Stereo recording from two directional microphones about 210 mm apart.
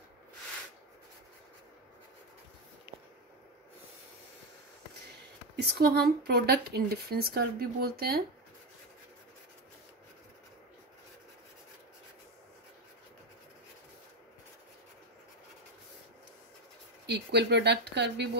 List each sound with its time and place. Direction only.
5.6 s speech: 50° right (ahead or behind)
17.0 s speech: 55° right (ahead or behind)